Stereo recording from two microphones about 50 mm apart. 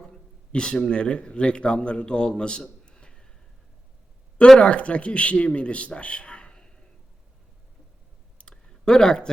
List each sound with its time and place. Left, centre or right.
0.5 s a man's voice: centre
4.6 s a man's voice: left
5.5 s a sound: left
8.4 s clicking: centre